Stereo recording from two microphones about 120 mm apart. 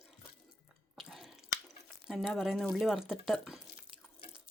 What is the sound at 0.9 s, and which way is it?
Chewing, centre (ahead or behind).